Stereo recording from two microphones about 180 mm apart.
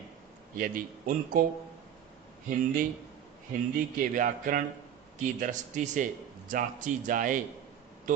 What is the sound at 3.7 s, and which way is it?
A man's voice, 50° right (ahead or behind).